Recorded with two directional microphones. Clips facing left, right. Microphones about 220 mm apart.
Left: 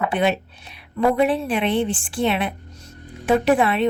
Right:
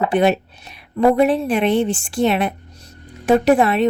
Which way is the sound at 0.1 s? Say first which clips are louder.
Right 5 dB; 40° right (ahead or behind).